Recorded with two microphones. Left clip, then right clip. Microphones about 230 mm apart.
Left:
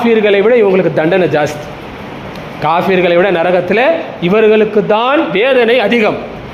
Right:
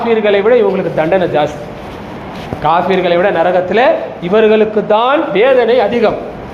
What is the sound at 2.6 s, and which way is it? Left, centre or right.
A man's voice, left.